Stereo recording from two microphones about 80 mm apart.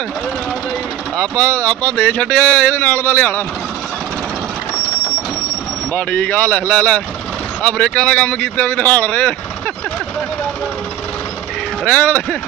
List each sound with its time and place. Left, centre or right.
1.1 s speech: centre
5.9 s speech: centre
11.8 s speech: centre